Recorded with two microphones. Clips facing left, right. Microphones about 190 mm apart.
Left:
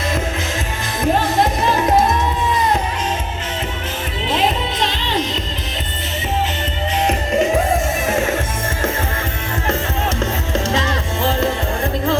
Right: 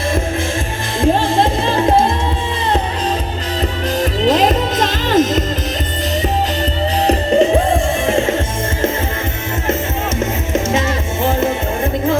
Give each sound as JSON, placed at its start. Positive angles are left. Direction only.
{"t": 1.0, "sound": "music", "side_deg": -25}
{"t": 4.3, "sound": "music", "side_deg": -40}
{"t": 7.1, "sound": "music", "side_deg": -30}
{"t": 10.2, "sound": "music", "side_deg": -20}